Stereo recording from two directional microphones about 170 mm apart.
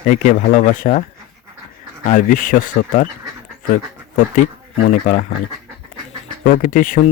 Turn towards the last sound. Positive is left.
turn(degrees=50)  # may be behind; listen again after turning